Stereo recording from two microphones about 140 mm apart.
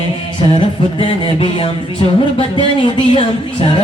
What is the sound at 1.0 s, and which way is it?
Music, 40° left (ahead or behind).